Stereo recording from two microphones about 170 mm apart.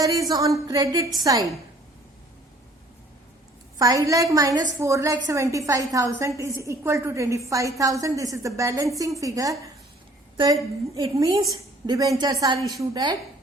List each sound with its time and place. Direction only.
0.0 s a woman's voice: 20° right (ahead or behind)
3.8 s a woman's voice: 20° right (ahead or behind)